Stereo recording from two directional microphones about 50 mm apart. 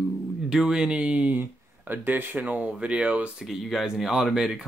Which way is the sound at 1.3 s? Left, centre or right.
Right.